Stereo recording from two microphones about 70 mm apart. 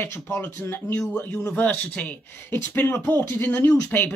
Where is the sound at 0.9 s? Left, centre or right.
Centre.